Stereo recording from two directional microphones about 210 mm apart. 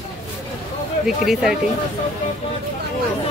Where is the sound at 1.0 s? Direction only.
Centre (ahead or behind).